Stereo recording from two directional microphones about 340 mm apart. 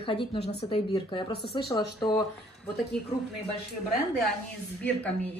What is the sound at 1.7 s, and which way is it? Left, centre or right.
Speech, centre.